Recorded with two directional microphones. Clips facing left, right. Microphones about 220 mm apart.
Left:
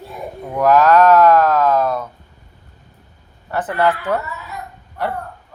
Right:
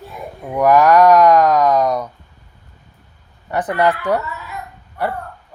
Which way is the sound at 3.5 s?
15° right (ahead or behind).